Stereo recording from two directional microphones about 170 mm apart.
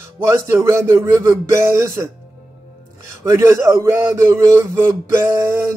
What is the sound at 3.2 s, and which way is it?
Speech, 15° right (ahead or behind).